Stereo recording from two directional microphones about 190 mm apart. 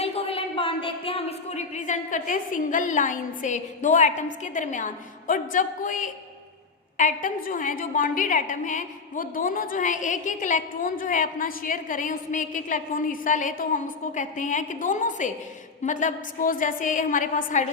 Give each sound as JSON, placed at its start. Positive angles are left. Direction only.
{"t": 0.0, "sound": "a woman's voice", "side_deg": 30}